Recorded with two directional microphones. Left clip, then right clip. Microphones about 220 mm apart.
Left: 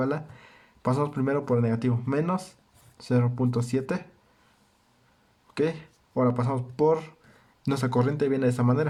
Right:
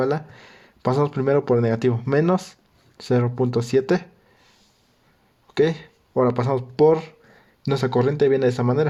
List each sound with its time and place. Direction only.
0.0 s speech: 20° right (ahead or behind)
5.5 s speech: 20° right (ahead or behind)